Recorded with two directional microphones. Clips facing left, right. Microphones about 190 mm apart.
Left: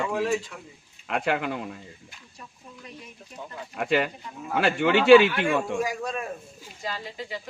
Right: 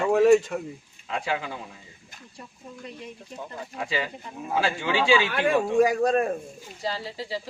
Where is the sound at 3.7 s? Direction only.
65° left (ahead or behind).